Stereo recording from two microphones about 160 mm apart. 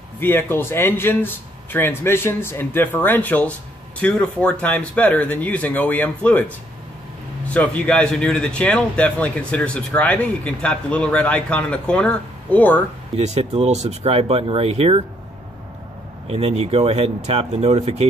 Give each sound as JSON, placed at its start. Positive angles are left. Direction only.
{"t": 0.2, "sound": "speech", "side_deg": 15}
{"t": 7.5, "sound": "speech", "side_deg": 10}
{"t": 13.1, "sound": "speech", "side_deg": -40}
{"t": 16.3, "sound": "speech", "side_deg": -40}